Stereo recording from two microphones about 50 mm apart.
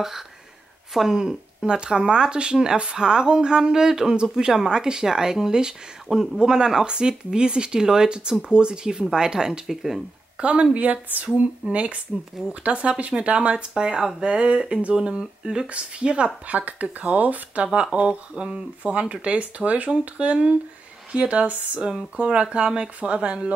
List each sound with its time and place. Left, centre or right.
0.9 s speech: centre
10.4 s speech: right
16.4 s speech: right
16.8 s speech: centre
17.2 s speech: right
17.9 s speech: centre
18.8 s speech: right